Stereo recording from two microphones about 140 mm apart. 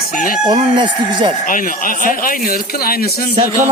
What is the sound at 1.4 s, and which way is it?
Speech, 75° left (ahead or behind).